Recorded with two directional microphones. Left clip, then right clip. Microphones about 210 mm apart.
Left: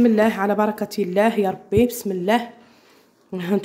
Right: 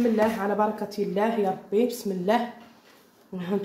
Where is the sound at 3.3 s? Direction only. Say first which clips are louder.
Left 6 dB; 50° left (ahead or behind).